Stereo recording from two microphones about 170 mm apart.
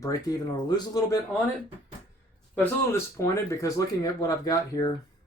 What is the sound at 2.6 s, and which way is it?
Speech, 15° left (ahead or behind).